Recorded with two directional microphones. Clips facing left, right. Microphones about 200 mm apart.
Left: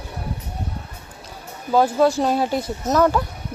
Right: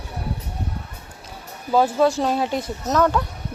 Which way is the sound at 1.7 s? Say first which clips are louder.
Left 1 dB; centre (ahead or behind).